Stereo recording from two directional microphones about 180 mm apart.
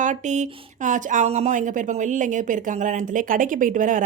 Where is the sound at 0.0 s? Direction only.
40° right (ahead or behind).